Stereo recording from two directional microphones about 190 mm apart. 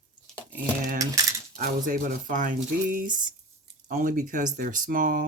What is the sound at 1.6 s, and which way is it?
Speech, 45° right (ahead or behind).